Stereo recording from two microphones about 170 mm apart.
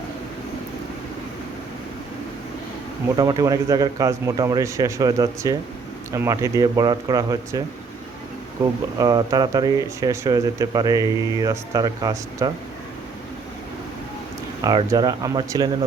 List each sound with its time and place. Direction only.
3.2 s speech: 20° right (ahead or behind)
9.0 s speech: 20° right (ahead or behind)
14.6 s speech: 25° right (ahead or behind)